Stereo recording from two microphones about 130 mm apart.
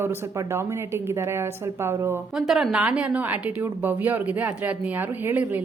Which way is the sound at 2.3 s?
Centre (ahead or behind).